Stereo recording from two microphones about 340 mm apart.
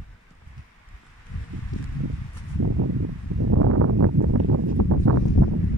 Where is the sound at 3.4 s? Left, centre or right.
Right.